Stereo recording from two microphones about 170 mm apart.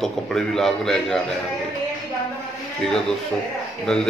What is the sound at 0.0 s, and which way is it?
Speech, centre (ahead or behind).